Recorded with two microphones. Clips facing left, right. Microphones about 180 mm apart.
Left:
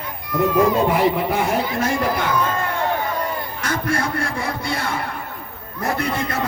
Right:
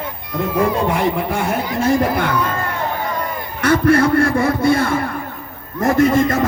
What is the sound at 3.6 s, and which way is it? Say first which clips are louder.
A man's voice: right 11 dB; 60° right (ahead or behind).